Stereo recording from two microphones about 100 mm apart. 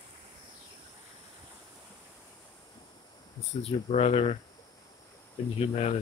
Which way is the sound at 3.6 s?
90° left.